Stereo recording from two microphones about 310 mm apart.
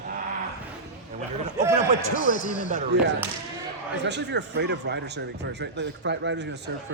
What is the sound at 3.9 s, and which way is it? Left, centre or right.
Speech, right.